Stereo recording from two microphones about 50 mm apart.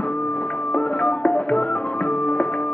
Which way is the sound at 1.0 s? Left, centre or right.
Left.